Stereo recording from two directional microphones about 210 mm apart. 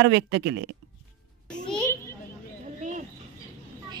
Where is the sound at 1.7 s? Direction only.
10° left (ahead or behind).